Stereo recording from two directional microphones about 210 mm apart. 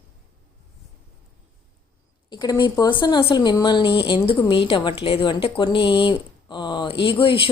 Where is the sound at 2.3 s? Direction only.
20° left (ahead or behind).